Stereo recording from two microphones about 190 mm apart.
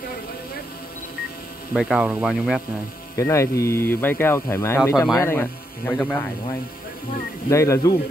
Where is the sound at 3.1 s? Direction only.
15° left (ahead or behind).